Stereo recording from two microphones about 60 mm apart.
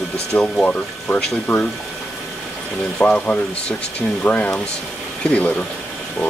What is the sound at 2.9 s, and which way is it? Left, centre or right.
Speech, left.